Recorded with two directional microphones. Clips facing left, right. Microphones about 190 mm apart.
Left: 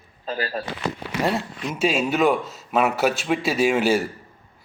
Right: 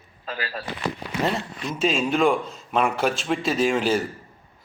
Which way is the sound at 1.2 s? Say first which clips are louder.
Left 2 dB; 10° left (ahead or behind).